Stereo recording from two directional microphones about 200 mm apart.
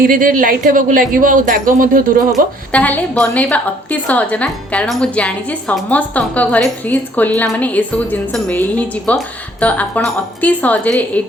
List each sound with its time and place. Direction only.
0.0 s speech: 45° right (ahead or behind)
2.3 s a woman's voice: 5° left (ahead or behind)